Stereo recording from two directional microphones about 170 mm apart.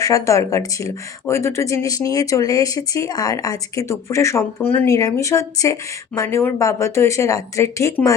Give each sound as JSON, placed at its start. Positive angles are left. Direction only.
{"t": 0.0, "sound": "speech", "side_deg": 20}